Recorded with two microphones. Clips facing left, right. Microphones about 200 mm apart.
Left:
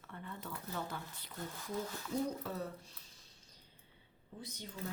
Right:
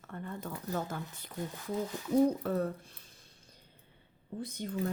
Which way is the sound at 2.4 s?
55° right (ahead or behind).